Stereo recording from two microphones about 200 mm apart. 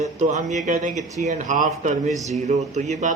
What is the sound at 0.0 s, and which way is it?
A man's voice, 35° right (ahead or behind).